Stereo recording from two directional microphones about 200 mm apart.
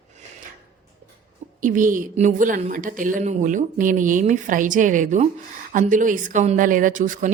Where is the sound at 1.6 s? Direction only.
40° right (ahead or behind).